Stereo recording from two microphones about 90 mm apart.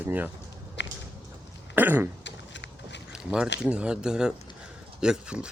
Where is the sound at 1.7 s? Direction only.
20° right (ahead or behind).